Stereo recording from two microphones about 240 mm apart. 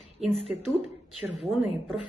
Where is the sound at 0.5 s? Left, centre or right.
Centre.